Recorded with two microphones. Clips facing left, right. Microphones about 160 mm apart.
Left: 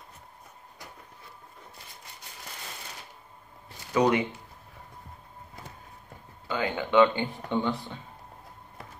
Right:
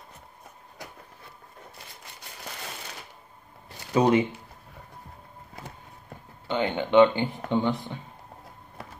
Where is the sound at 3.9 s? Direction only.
25° right (ahead or behind).